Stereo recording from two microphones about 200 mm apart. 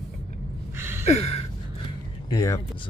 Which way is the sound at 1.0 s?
35° left (ahead or behind).